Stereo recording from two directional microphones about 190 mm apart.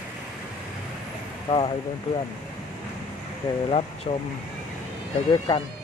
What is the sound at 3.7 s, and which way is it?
Speech, 30° left (ahead or behind).